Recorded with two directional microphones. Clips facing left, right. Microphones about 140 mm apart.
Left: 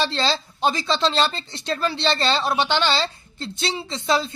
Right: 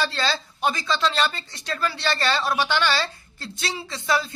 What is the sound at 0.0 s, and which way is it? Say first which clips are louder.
Speech: left 3 dB; 25° left (ahead or behind).